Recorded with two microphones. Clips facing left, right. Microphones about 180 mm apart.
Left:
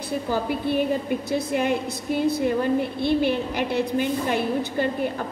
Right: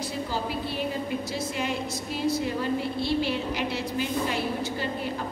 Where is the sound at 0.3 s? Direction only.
55° left (ahead or behind).